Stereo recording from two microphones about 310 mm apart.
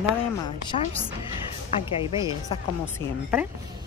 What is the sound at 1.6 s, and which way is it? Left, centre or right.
Speech, centre.